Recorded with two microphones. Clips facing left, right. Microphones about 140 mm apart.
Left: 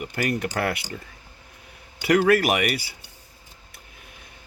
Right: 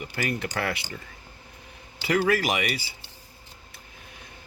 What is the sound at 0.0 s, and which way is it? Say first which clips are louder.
Speech: left 4 dB; 50° left (ahead or behind).